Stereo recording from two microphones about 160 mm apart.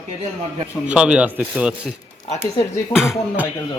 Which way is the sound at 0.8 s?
5° right (ahead or behind).